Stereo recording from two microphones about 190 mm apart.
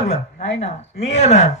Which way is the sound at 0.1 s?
35° left (ahead or behind).